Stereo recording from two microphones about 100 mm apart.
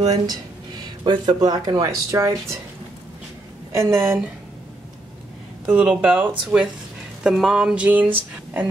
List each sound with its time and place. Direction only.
0.1 s speech: 45° right (ahead or behind)
3.7 s a woman's voice: 30° right (ahead or behind)
5.7 s speech: 15° right (ahead or behind)